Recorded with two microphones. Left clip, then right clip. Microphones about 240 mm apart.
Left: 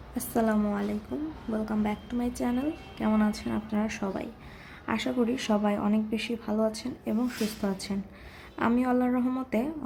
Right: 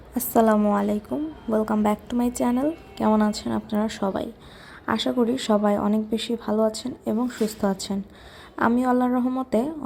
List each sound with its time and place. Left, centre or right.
0.2 s a woman's voice: right; by 9.6 s centre